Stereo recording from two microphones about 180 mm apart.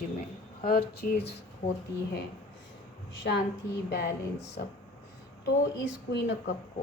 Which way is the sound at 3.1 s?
70° left (ahead or behind).